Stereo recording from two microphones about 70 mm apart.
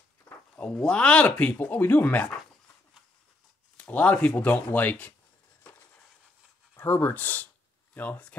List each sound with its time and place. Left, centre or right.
0.6 s speech: centre
3.7 s speech: centre
6.7 s speech: left